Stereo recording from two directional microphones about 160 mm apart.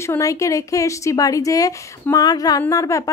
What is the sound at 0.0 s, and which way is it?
A woman's voice, 20° left (ahead or behind).